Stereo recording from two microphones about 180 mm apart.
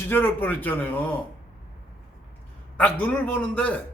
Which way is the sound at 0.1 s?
10° left (ahead or behind).